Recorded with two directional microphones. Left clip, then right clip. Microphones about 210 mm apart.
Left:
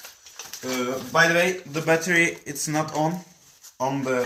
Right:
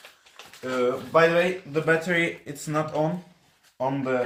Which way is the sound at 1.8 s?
15° right (ahead or behind).